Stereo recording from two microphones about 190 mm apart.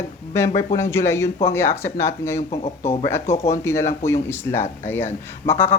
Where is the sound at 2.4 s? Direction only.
35° left (ahead or behind).